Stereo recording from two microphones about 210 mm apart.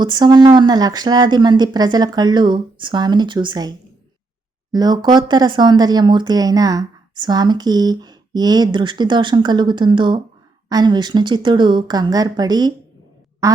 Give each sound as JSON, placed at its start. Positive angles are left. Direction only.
{"t": 0.0, "sound": "speech", "side_deg": -20}